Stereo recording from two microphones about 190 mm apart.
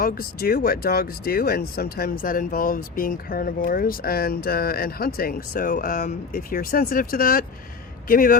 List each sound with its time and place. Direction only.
0.0 s speech: 50° left (ahead or behind)